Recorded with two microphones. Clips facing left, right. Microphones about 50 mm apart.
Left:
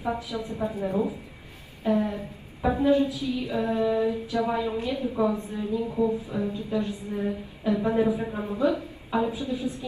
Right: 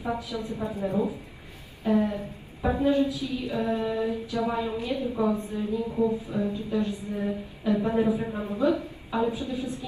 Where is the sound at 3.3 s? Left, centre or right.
Left.